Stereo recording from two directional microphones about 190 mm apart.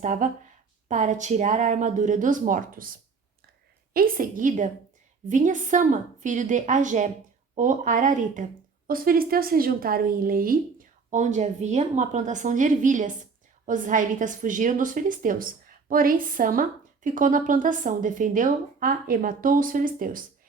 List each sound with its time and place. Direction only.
0.0 s a woman's voice: 45° right (ahead or behind)
3.9 s a woman's voice: 50° right (ahead or behind)